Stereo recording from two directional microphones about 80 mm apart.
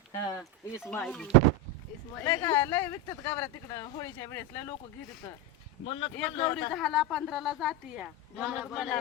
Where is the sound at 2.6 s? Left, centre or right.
Left.